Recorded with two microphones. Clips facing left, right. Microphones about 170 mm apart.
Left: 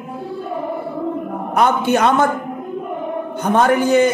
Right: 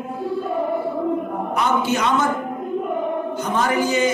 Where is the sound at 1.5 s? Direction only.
55° left (ahead or behind).